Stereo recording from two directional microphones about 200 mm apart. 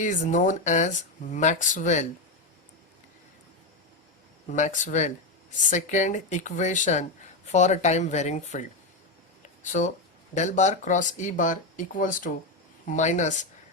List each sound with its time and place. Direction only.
0.0 s speech: 40° left (ahead or behind)
4.5 s speech: 35° left (ahead or behind)
9.7 s speech: 40° left (ahead or behind)